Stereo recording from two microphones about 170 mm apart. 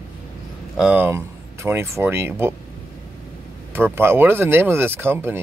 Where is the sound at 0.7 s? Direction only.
5° right (ahead or behind).